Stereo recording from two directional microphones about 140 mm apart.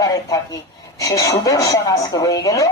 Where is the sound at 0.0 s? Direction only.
25° left (ahead or behind).